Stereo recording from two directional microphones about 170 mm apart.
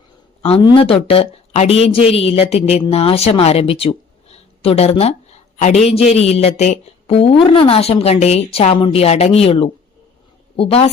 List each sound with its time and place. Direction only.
0.4 s speech: 35° left (ahead or behind)